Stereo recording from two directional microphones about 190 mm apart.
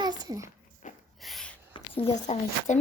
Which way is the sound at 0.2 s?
20° right (ahead or behind).